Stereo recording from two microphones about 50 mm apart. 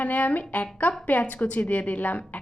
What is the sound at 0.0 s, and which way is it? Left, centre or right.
A woman's voice, left.